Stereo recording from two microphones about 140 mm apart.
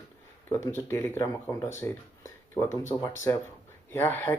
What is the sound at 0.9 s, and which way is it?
Speech, 20° left (ahead or behind).